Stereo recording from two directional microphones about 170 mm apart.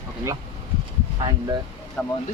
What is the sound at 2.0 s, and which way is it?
Speech, 5° left (ahead or behind).